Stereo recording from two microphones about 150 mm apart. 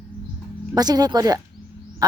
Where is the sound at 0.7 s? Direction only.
25° right (ahead or behind).